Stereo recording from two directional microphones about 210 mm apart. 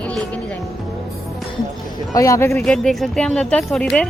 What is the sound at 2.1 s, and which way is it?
Speech, 15° left (ahead or behind).